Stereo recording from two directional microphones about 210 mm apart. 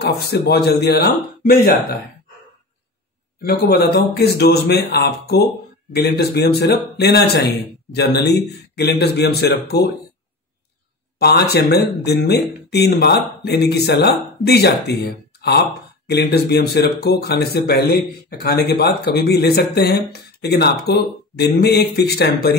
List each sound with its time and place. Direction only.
0.0 s speech: 50° left (ahead or behind)
3.4 s speech: 50° left (ahead or behind)
11.1 s speech: 50° left (ahead or behind)